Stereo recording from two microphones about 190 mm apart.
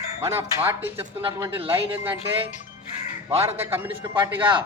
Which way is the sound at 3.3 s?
15° right (ahead or behind).